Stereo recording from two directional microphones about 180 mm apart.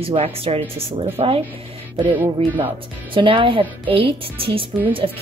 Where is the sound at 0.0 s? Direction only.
30° right (ahead or behind).